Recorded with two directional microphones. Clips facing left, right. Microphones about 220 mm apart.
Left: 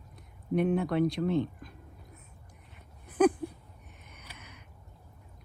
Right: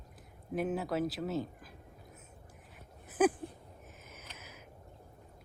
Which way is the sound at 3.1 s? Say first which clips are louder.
Left 4 dB; 5° right (ahead or behind).